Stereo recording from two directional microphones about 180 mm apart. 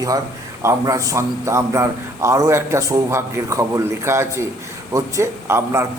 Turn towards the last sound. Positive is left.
turn(degrees=-15)  # may be behind; listen again after turning